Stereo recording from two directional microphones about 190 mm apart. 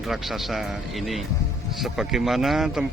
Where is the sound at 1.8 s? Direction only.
Centre (ahead or behind).